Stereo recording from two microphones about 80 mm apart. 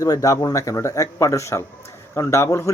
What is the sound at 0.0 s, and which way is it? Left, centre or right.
Speech, left.